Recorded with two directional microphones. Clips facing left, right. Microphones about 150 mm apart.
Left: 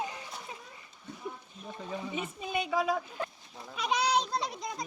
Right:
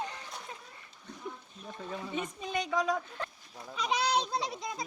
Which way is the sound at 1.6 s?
5° left (ahead or behind).